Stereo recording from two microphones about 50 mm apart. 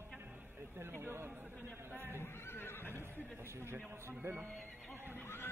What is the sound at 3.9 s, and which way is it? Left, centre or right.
Speech, right.